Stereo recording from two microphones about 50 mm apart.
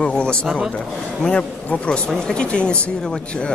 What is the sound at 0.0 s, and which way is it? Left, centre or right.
Speech, centre.